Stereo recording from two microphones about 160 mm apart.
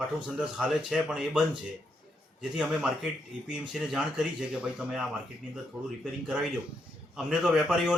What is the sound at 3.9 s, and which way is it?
Speech, 5° right (ahead or behind).